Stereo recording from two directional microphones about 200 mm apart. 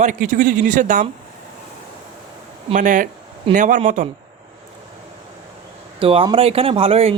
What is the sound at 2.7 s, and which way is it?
Speech, 40° right (ahead or behind).